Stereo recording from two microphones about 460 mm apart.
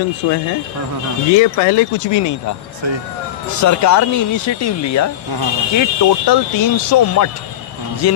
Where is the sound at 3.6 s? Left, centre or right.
Left.